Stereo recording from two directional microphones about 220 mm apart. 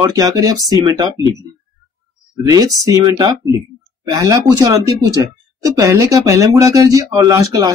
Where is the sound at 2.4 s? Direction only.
15° right (ahead or behind).